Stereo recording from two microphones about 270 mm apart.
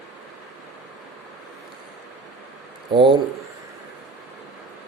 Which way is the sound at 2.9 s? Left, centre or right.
Centre.